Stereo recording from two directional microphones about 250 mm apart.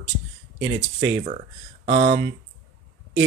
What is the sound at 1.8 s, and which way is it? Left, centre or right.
Speech, right.